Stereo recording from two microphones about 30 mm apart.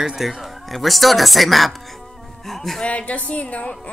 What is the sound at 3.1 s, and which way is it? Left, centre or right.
Speech, left.